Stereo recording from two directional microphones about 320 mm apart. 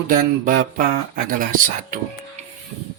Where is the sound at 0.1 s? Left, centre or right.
Right.